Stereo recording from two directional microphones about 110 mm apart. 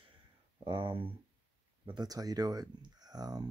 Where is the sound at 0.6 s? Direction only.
50° right (ahead or behind).